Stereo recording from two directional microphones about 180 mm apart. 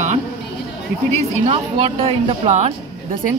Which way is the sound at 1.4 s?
30° right (ahead or behind).